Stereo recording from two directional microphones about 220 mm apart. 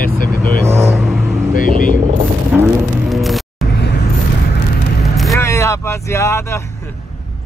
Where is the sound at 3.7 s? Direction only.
50° left (ahead or behind).